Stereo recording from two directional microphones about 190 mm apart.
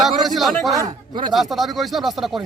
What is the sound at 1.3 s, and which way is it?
Speech, centre (ahead or behind).